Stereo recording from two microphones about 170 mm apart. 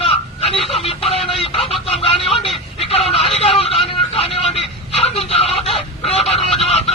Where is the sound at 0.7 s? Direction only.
35° left (ahead or behind).